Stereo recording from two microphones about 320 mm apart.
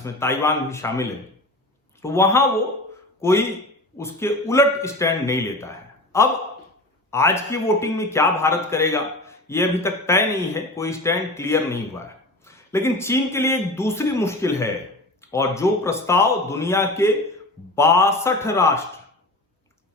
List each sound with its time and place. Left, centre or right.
0.0 s a man's voice: centre